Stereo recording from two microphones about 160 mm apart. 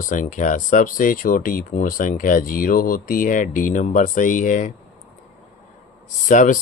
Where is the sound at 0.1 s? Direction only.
50° left (ahead or behind).